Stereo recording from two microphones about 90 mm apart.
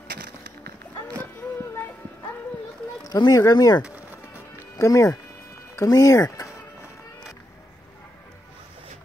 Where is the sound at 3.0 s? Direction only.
45° left (ahead or behind).